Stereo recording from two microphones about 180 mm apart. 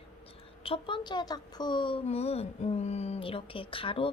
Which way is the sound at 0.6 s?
30° left (ahead or behind).